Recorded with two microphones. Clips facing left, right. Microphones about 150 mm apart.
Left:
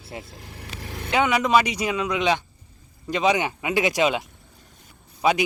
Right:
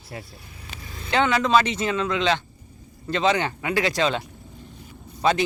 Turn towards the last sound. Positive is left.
turn(degrees=10)  # may be behind; listen again after turning